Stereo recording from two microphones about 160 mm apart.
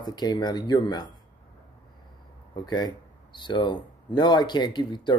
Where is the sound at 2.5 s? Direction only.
25° left (ahead or behind).